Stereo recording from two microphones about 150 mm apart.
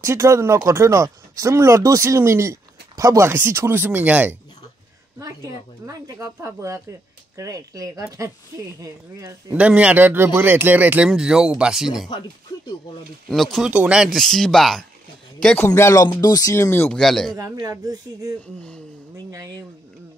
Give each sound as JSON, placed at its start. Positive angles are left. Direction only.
{"t": 0.0, "sound": "speech", "side_deg": -20}
{"t": 5.2, "sound": "speech", "side_deg": -25}
{"t": 9.2, "sound": "speech", "side_deg": -10}
{"t": 13.3, "sound": "speech", "side_deg": 0}
{"t": 15.4, "sound": "speech", "side_deg": 15}
{"t": 17.0, "sound": "speech", "side_deg": 0}
{"t": 17.3, "sound": "speech", "side_deg": -25}
{"t": 19.3, "sound": "speech", "side_deg": -25}